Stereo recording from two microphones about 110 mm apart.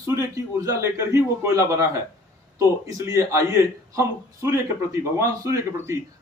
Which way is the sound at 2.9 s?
30° right (ahead or behind).